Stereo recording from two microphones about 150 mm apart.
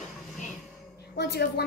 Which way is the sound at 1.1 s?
90° left.